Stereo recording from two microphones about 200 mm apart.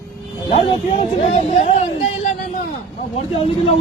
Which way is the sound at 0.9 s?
35° left (ahead or behind).